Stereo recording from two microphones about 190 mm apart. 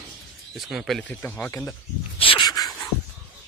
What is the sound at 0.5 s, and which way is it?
Speech, centre (ahead or behind).